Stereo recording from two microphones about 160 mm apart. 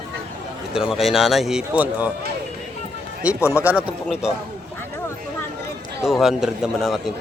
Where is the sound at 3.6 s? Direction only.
10° right (ahead or behind).